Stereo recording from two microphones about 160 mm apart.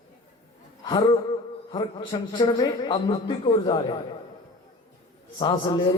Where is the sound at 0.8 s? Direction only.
30° left (ahead or behind).